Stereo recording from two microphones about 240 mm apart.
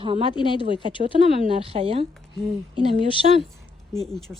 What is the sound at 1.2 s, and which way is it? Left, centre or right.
A woman's voice, right.